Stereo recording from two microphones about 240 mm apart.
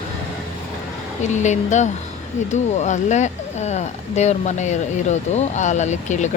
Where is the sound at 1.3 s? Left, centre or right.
Left.